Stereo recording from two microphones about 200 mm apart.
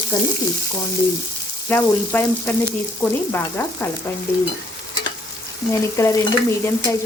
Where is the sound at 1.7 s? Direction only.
10° left (ahead or behind).